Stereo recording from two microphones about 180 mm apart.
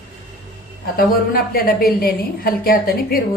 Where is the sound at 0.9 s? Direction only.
55° left (ahead or behind).